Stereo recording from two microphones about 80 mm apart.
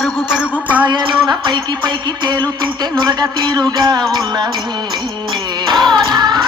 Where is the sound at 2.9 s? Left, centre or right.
Right.